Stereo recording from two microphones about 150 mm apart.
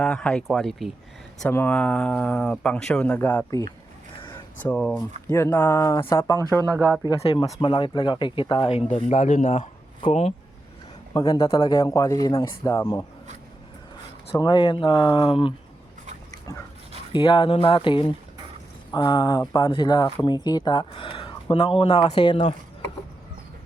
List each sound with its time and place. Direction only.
0.0 s speech: 5° left (ahead or behind)
1.5 s speech: 10° left (ahead or behind)
4.6 s speech: 10° left (ahead or behind)
7.2 s speech: 40° left (ahead or behind)
9.1 s speech: 60° left (ahead or behind)
9.5 s speech: 40° left (ahead or behind)
11.1 s speech: 25° left (ahead or behind)
14.3 s speech: 30° left (ahead or behind)
17.1 s speech: 35° left (ahead or behind)